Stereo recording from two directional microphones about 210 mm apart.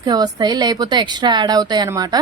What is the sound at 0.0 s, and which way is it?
Speech, 20° right (ahead or behind).